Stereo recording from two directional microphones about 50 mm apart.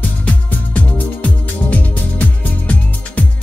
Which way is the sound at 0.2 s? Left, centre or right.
Left.